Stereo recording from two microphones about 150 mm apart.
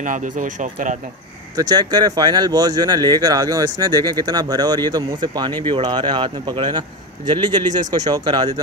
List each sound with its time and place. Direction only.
0.0 s speech: 60° right (ahead or behind)
1.6 s speech: 25° right (ahead or behind)